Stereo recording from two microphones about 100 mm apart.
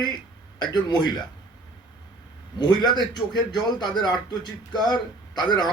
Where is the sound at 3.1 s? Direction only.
45° left (ahead or behind).